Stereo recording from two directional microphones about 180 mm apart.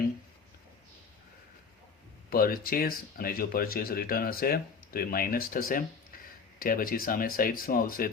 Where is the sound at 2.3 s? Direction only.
55° left (ahead or behind).